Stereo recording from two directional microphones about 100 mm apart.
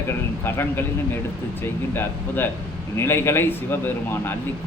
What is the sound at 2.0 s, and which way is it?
Speech, 20° left (ahead or behind).